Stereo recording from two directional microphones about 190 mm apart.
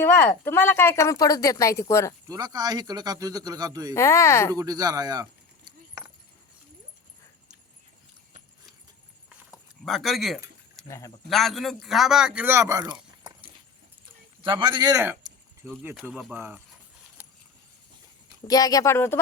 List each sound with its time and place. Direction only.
0.0 s a woman's voice: 10° left (ahead or behind)
2.2 s speech: 20° right (ahead or behind)
3.9 s a woman's voice: 15° left (ahead or behind)
4.5 s keys jangling: 20° right (ahead or behind)
9.8 s speech: centre (ahead or behind)
10.8 s a woman's voice: 15° left (ahead or behind)
11.3 s speech: centre (ahead or behind)
18.4 s a woman's voice: 20° left (ahead or behind)